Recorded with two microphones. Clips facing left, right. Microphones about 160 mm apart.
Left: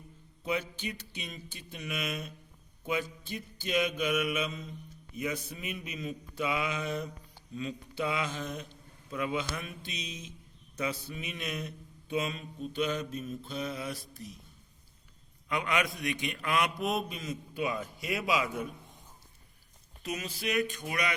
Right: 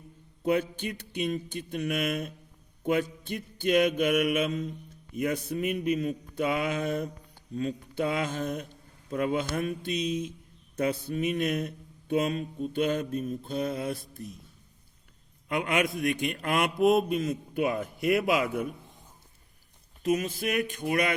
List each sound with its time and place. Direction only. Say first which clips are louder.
0.4 s mantra: right 7 dB; 55° right (ahead or behind)
15.4 s mantra: right 4 dB; 50° right (ahead or behind)
20.0 s mantra: right 10 dB; 50° right (ahead or behind)